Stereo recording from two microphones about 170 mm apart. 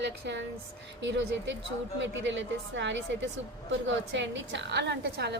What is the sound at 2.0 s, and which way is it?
A woman's voice, 90° right.